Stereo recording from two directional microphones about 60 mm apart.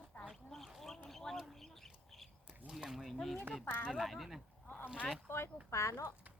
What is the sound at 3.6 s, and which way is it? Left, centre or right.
Speech, left.